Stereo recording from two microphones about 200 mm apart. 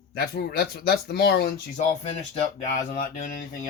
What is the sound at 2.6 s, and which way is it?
Speech, 40° left (ahead or behind).